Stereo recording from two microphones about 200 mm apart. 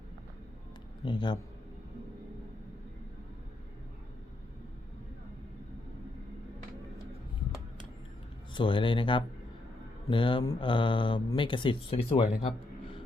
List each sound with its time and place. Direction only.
1.0 s speech: 20° left (ahead or behind)
8.5 s speech: 25° left (ahead or behind)